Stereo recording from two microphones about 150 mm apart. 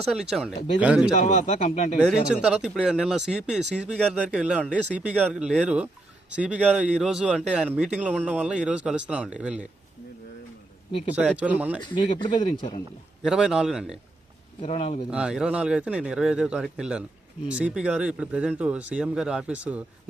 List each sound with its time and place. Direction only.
0.1 s speech: 5° right (ahead or behind)
1.1 s speech: 50° left (ahead or behind)
2.3 s a man's voice: 5° right (ahead or behind)
11.3 s a man's voice: 10° right (ahead or behind)
11.8 s speech: 30° left (ahead or behind)
13.2 s speech: 5° right (ahead or behind)
14.6 s speech: 40° left (ahead or behind)
15.1 s a man's voice: 5° right (ahead or behind)